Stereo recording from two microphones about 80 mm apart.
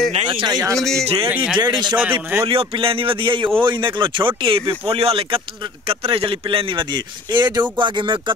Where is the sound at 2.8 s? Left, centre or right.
Right.